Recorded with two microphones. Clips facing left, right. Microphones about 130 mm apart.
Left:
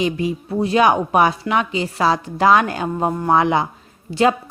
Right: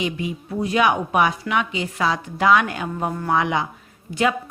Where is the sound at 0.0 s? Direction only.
35° left (ahead or behind).